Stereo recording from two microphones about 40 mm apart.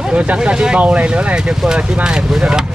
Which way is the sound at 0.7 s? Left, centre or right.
Right.